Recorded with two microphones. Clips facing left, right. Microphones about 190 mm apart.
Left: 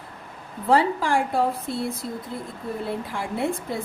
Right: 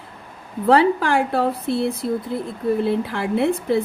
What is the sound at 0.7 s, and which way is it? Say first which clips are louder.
Speech: right 4 dB; 65° right (ahead or behind).